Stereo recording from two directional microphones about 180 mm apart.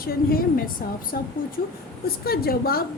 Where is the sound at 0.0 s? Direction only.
55° left (ahead or behind).